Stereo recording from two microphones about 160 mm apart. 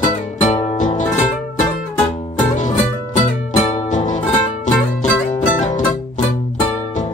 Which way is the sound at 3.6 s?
50° left (ahead or behind).